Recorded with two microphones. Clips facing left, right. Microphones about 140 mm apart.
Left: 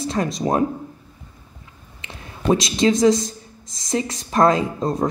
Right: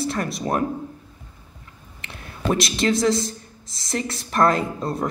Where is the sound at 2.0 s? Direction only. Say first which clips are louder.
Left 3 dB; 15° left (ahead or behind).